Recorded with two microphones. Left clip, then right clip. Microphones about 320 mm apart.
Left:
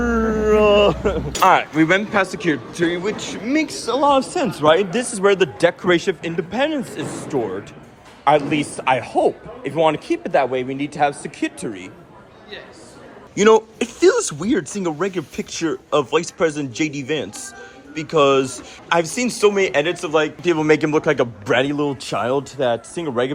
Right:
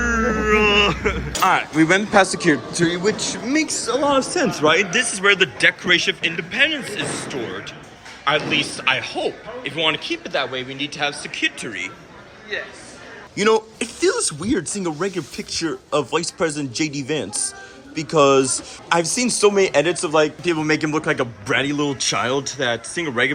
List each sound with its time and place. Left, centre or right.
0.0 s a sound: centre
1.4 s a man's voice: centre
8.2 s a man's voice: centre
13.3 s a man's voice: centre